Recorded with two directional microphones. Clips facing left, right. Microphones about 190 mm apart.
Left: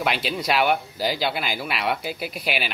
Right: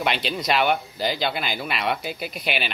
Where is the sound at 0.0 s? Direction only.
5° left (ahead or behind).